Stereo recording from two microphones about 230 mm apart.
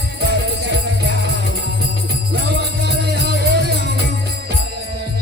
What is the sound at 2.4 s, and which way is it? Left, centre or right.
Music, right.